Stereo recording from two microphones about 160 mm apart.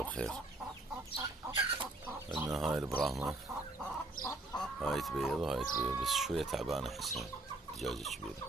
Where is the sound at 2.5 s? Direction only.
Centre (ahead or behind).